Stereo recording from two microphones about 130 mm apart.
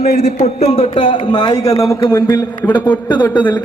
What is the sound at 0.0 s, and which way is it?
A man's voice, 55° left (ahead or behind).